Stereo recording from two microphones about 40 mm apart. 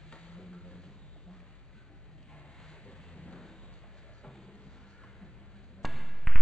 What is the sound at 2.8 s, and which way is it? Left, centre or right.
Thunder, left.